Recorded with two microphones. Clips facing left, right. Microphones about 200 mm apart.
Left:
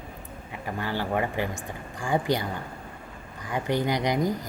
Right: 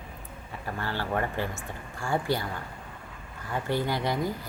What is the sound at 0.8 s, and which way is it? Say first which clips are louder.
Speech: left 3 dB; 15° left (ahead or behind).